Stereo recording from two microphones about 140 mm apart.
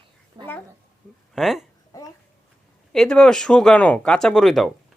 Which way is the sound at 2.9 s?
5° left (ahead or behind).